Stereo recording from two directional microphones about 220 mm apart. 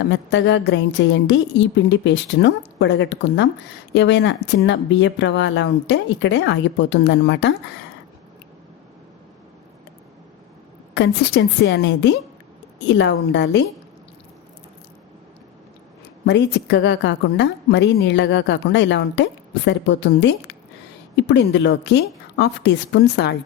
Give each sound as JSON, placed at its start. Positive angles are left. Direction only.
{"t": 0.0, "sound": "speech", "side_deg": 55}
{"t": 10.9, "sound": "a woman's voice", "side_deg": 50}
{"t": 16.2, "sound": "a woman's voice", "side_deg": 50}